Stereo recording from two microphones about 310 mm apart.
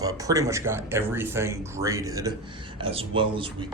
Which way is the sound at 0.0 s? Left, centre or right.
Centre.